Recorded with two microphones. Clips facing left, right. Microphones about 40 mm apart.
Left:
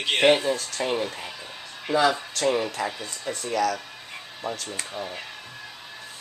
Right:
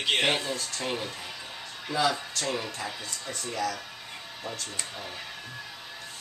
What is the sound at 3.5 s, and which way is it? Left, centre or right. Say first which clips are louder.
Speech: left 7 dB; left.